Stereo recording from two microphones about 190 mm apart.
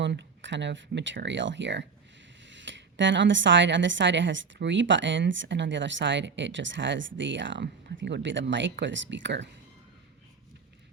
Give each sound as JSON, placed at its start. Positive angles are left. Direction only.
{"t": 0.0, "sound": "speech", "side_deg": -70}